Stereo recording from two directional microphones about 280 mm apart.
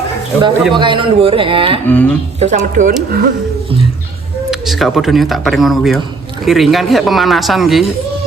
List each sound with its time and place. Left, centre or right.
0.7 s a man's voice: centre
1.9 s speech: centre
2.4 s a man's voice: right
4.5 s speech: centre